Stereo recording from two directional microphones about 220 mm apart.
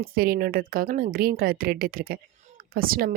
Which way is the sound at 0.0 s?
40° right (ahead or behind).